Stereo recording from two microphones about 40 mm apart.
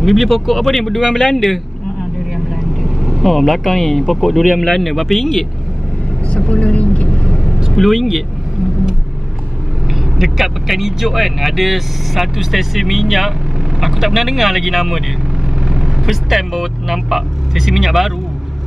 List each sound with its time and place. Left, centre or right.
0.0 s speech: centre
1.0 s speech: centre
1.3 s speech: centre
2.3 s vehicle: centre
4.8 s speech: centre
6.3 s vehicle: left
7.2 s vehicle: centre
7.7 s speech: centre
10.1 s speech: centre